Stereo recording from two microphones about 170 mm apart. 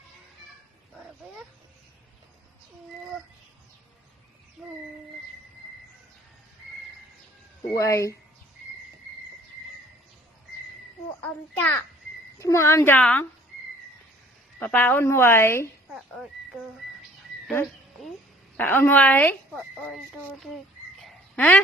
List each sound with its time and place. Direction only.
4.6 s child singing: 5° right (ahead or behind)
7.7 s speech: 20° left (ahead or behind)
11.2 s a sound: 10° left (ahead or behind)
12.4 s speech: 15° left (ahead or behind)
14.6 s speech: 10° left (ahead or behind)
15.9 s frog: 5° right (ahead or behind)
18.5 s speech: 10° left (ahead or behind)
21.0 s a sound: 10° left (ahead or behind)